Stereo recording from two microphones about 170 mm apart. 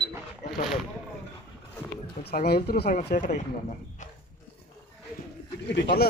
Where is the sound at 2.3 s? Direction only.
70° left (ahead or behind); by 3.4 s 50° left (ahead or behind).